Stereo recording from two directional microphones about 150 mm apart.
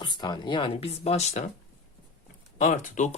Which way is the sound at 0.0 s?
30° left (ahead or behind).